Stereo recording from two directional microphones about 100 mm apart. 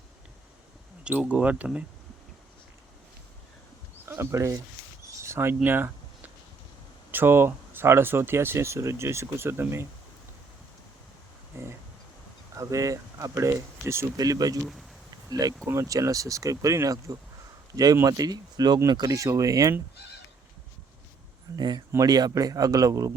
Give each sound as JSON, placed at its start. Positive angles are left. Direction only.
{"t": 1.0, "sound": "speech", "side_deg": -10}
{"t": 4.1, "sound": "speech", "side_deg": -25}
{"t": 5.2, "sound": "a sound", "side_deg": -25}
{"t": 7.1, "sound": "speech", "side_deg": -20}
{"t": 11.6, "sound": "speech", "side_deg": -25}
{"t": 14.6, "sound": "speech", "side_deg": 0}
{"t": 15.3, "sound": "speech", "side_deg": -40}
{"t": 15.6, "sound": "speech", "side_deg": -30}
{"t": 19.1, "sound": "speech", "side_deg": -30}
{"t": 21.5, "sound": "speech", "side_deg": -45}